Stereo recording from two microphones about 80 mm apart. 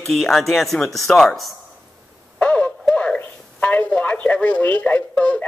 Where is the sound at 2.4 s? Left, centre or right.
Centre.